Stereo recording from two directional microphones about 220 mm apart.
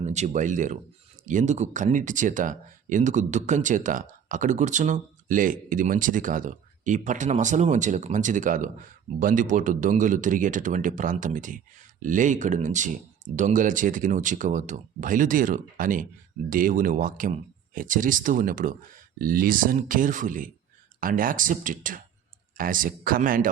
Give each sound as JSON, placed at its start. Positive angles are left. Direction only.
{"t": 0.0, "sound": "speech", "side_deg": -30}